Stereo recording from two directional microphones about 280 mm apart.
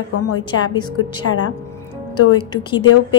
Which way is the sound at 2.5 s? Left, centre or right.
Centre.